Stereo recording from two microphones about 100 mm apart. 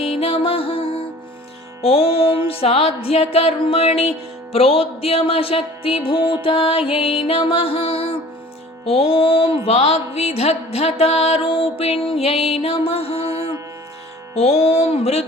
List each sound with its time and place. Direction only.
0.1 s music: 75° left (ahead or behind); by 4.1 s 90° left
4.5 s music: 75° left (ahead or behind)
14.3 s music: 90° left